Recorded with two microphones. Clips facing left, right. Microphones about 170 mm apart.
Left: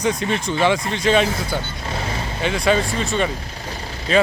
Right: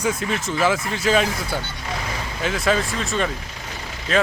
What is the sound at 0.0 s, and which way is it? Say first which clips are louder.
Speech: left 2 dB; 5° right (ahead or behind).